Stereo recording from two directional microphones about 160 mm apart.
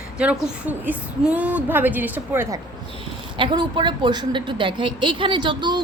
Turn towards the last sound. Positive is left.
turn(degrees=-30)  # may be behind; listen again after turning